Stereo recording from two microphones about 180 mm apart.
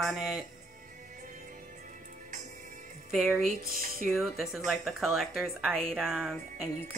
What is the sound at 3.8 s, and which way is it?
Speech, 50° right (ahead or behind).